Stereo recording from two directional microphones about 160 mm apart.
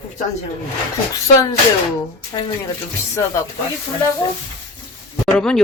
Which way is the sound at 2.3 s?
25° left (ahead or behind).